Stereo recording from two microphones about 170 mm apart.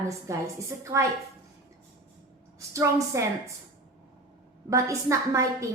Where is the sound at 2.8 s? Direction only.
15° right (ahead or behind).